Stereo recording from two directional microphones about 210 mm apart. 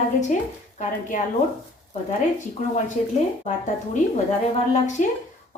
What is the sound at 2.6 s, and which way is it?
A woman's voice, 35° left (ahead or behind).